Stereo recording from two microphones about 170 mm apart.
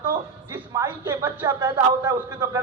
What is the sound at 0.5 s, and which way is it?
A man's voice, 20° right (ahead or behind).